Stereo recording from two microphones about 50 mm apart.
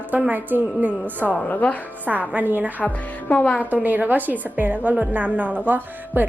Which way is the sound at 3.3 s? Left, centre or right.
Left.